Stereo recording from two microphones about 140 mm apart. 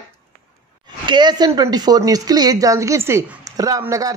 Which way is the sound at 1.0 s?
30° right (ahead or behind).